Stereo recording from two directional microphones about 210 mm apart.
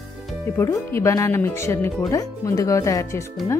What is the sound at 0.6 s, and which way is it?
Speech, 15° left (ahead or behind).